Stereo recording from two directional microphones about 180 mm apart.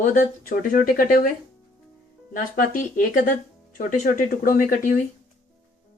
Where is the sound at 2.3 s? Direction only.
50° left (ahead or behind).